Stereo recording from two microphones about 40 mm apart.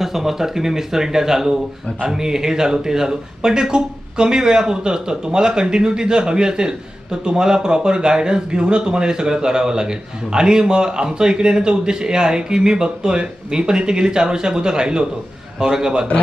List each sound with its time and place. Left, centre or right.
0.0 s speech: centre